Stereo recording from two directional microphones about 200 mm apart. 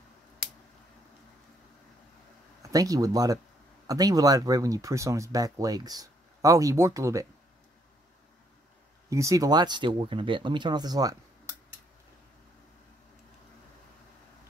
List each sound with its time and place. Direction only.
2.6 s speech: 15° right (ahead or behind)
9.1 s speech: 15° right (ahead or behind)